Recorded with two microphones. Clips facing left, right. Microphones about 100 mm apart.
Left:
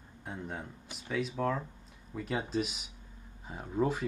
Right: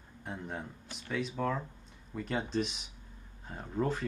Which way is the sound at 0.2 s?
Centre (ahead or behind).